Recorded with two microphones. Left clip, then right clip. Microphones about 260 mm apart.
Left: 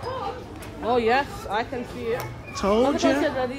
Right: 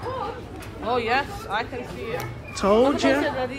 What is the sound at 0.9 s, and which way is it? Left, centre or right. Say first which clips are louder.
Speech: left 2 dB; left.